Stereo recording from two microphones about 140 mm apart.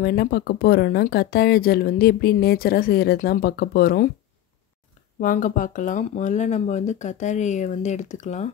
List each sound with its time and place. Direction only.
0.1 s speech: 90° left
5.2 s speech: 75° left (ahead or behind); by 8.5 s 55° left (ahead or behind)